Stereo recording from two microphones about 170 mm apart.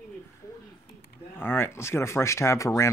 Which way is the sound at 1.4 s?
10° left (ahead or behind).